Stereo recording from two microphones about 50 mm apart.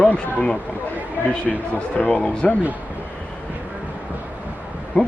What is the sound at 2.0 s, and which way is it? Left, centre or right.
Speech, left.